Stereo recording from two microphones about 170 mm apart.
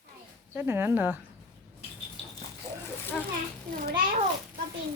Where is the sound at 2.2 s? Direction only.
35° left (ahead or behind).